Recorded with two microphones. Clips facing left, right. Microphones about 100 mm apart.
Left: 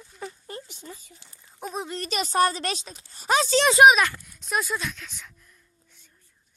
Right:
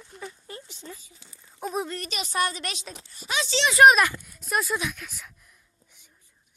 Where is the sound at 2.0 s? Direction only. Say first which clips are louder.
Left 5 dB; 40° left (ahead or behind).